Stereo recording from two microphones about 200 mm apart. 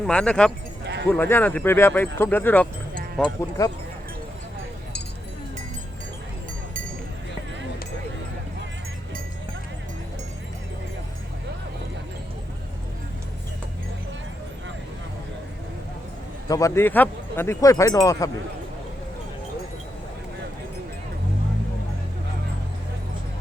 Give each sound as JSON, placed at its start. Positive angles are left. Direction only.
{"t": 0.0, "sound": "speech", "side_deg": 5}
{"t": 16.5, "sound": "speech", "side_deg": 15}